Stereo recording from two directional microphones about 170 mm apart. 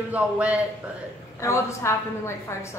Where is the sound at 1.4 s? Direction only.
15° left (ahead or behind).